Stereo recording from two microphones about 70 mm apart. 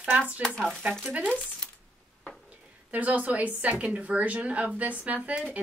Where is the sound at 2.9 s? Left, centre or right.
Right.